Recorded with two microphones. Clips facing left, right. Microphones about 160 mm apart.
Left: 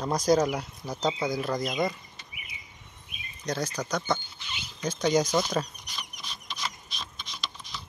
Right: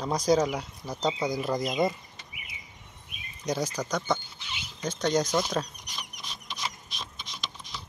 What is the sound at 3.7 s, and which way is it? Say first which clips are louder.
Speech: even; centre (ahead or behind).